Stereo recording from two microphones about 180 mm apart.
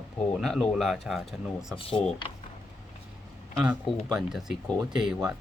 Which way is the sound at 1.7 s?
30° left (ahead or behind).